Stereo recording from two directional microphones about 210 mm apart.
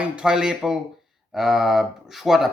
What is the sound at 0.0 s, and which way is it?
Speech, 5° right (ahead or behind).